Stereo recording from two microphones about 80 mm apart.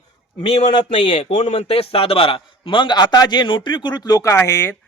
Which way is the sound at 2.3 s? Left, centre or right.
Left.